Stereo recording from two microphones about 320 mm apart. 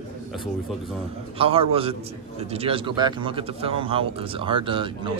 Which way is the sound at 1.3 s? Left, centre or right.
Centre.